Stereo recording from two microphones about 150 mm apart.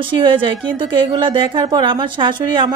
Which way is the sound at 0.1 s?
35° right (ahead or behind).